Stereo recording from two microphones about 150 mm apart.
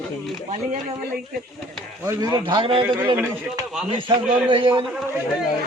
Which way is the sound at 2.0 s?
25° right (ahead or behind).